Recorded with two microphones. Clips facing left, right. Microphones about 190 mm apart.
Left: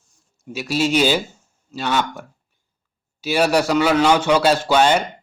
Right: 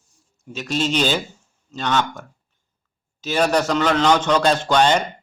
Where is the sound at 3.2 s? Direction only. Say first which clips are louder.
Left 1 dB; 10° left (ahead or behind).